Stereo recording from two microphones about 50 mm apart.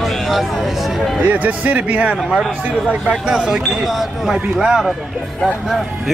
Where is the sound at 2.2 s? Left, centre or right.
Centre.